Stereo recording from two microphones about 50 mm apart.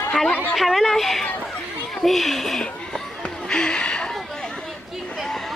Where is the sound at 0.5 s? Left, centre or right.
Centre.